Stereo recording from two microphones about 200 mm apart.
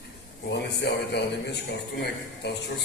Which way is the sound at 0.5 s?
60° left (ahead or behind).